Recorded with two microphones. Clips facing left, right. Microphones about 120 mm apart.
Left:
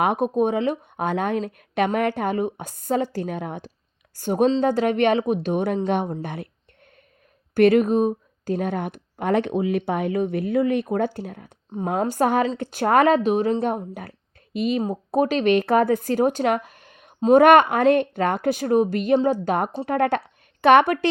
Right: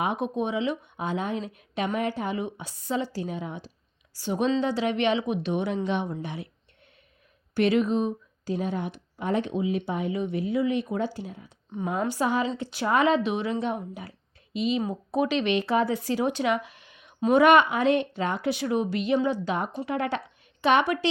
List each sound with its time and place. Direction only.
0.0 s a woman's voice: 50° left (ahead or behind)
7.5 s a woman's voice: 50° left (ahead or behind)
14.8 s a woman's voice: 40° left (ahead or behind)